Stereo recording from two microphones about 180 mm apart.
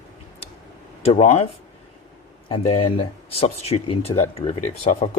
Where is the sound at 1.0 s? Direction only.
35° left (ahead or behind).